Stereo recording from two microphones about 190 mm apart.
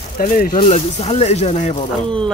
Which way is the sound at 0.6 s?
35° left (ahead or behind).